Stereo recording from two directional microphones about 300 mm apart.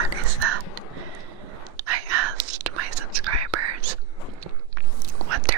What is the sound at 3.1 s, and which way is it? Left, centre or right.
Whispering, right.